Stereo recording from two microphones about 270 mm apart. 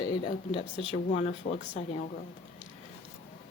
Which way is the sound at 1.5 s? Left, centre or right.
Left.